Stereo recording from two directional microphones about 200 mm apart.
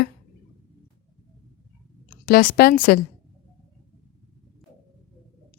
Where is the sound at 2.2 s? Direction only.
50° left (ahead or behind).